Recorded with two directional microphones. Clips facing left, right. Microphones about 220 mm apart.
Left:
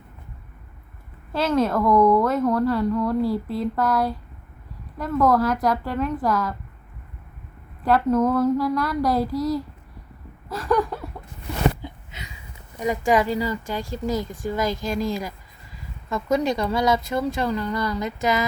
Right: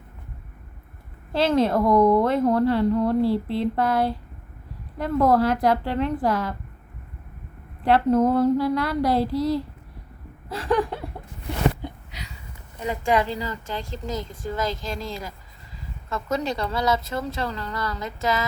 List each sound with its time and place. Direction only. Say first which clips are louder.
1.3 s a woman's voice: right 1 dB; 30° right (ahead or behind)
7.9 s a woman's voice: right 1 dB; 30° right (ahead or behind)
12.8 s speech: left 2 dB; 10° left (ahead or behind)